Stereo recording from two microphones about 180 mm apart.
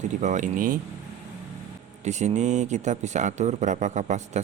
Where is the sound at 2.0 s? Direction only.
40° right (ahead or behind).